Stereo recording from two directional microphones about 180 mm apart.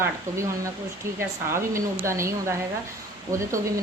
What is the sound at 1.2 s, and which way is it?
A woman's voice, 15° right (ahead or behind).